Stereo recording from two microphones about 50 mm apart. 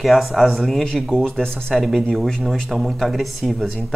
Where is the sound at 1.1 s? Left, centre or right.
Centre.